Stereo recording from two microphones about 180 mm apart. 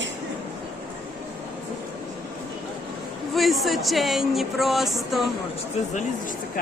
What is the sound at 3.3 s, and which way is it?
Speech, centre (ahead or behind).